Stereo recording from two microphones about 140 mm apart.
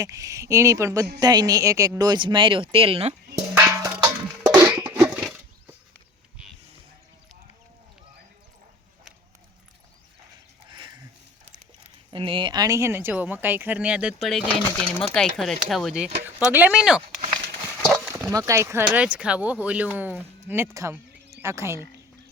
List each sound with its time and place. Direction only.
0.0 s a woman's voice: 25° right (ahead or behind); by 3.2 s 45° right (ahead or behind)
3.3 s music: 20° right (ahead or behind)
4.9 s a sound: 10° right (ahead or behind)
10.7 s a sound: 35° right (ahead or behind)
12.1 s speech: 40° right (ahead or behind); by 16.0 s centre (ahead or behind)
16.2 s speech: 15° right (ahead or behind)
17.8 s horse: centre (ahead or behind)
18.3 s speech: 20° right (ahead or behind)